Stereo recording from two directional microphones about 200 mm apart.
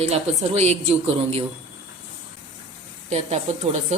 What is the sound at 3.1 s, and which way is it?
Speech, 35° right (ahead or behind).